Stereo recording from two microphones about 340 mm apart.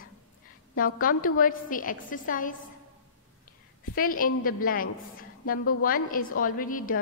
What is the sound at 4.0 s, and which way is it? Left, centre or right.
A woman's voice, left.